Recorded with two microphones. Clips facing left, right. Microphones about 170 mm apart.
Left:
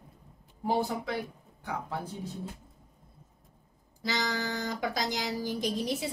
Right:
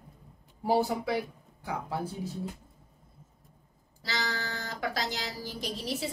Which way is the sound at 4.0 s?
15° left (ahead or behind).